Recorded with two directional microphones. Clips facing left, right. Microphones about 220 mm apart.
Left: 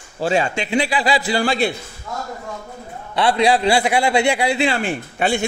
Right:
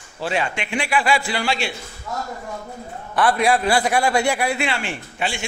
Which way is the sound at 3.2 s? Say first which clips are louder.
Left 2 dB; 30° left (ahead or behind).